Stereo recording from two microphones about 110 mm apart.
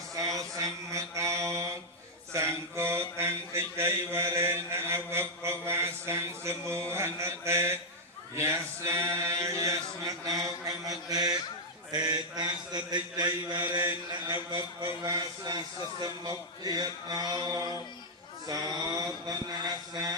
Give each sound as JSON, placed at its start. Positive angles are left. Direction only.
{"t": 0.1, "sound": "mantra", "side_deg": -30}
{"t": 13.6, "sound": "mantra", "side_deg": -20}
{"t": 14.5, "sound": "speech", "side_deg": -40}